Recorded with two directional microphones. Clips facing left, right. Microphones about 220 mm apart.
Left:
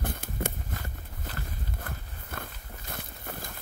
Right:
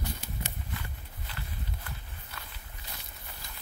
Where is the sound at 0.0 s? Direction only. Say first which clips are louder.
Left 6 dB; 50° left (ahead or behind).